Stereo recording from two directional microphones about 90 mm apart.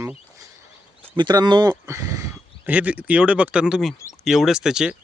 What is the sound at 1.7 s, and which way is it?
Speech, 35° right (ahead or behind).